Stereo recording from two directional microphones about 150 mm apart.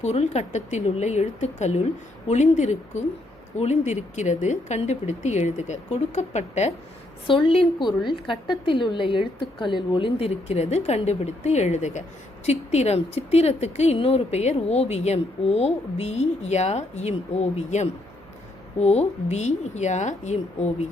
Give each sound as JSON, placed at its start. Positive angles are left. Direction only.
{"t": 0.0, "sound": "speech", "side_deg": 50}
{"t": 7.3, "sound": "a woman's voice", "side_deg": 35}